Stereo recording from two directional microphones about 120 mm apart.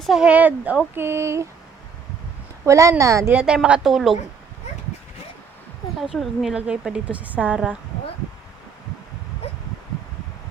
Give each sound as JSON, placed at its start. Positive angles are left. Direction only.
{"t": 0.0, "sound": "a woman's voice", "side_deg": -5}
{"t": 2.6, "sound": "speech", "side_deg": -25}
{"t": 3.3, "sound": "a woman's voice", "side_deg": -5}
{"t": 6.0, "sound": "a woman's voice", "side_deg": 0}